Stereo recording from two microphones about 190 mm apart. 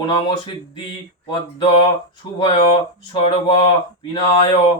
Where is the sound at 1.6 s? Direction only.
25° left (ahead or behind).